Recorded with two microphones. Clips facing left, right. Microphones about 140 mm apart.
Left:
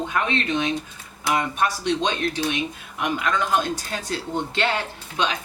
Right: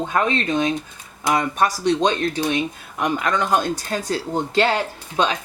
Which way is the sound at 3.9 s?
40° right (ahead or behind).